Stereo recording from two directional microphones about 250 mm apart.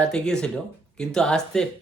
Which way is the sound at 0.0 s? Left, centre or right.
Centre.